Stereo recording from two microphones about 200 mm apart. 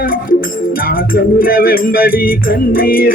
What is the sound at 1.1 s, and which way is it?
Music, 45° left (ahead or behind).